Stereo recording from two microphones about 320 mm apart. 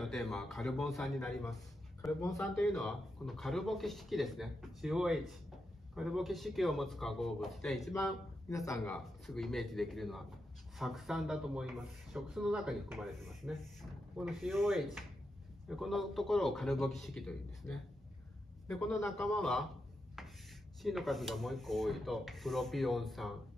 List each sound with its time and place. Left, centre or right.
0.0 s a man's voice: centre
20.2 s a sound: centre
20.8 s a man's voice: centre